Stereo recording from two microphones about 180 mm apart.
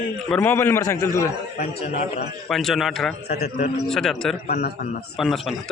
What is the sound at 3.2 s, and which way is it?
Speech, 60° left (ahead or behind).